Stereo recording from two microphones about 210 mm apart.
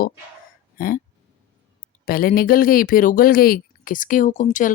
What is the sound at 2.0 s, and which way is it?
Speech, 45° left (ahead or behind).